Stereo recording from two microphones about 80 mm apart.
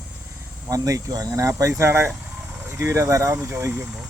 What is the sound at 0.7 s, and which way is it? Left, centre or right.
Speech, right.